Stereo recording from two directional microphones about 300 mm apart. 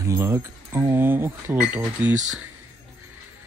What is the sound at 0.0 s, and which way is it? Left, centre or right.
Speech, centre.